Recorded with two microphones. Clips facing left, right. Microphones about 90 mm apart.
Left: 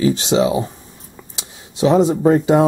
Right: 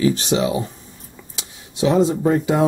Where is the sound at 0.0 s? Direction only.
25° left (ahead or behind).